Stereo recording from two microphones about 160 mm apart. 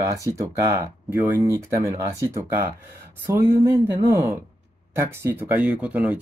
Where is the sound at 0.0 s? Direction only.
20° right (ahead or behind).